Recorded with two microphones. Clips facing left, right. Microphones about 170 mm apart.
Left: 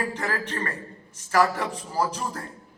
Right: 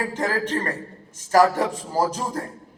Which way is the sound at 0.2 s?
45° right (ahead or behind).